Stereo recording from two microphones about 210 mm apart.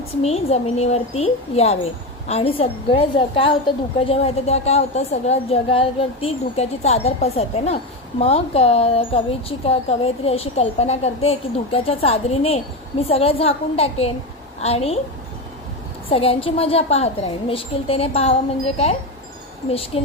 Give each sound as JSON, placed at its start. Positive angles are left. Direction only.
{"t": 0.2, "sound": "a woman's voice", "side_deg": 30}
{"t": 16.0, "sound": "speech", "side_deg": 25}